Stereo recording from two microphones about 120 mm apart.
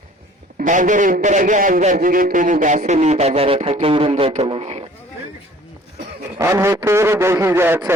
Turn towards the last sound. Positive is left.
turn(degrees=-20)  # may be behind; listen again after turning